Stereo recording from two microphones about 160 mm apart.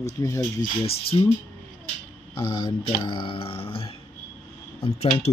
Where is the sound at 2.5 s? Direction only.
30° left (ahead or behind).